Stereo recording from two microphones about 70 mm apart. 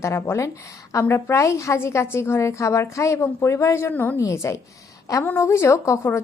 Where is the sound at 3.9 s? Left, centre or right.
Left.